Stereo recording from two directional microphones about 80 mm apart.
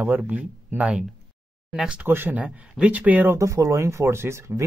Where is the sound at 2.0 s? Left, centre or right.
Right.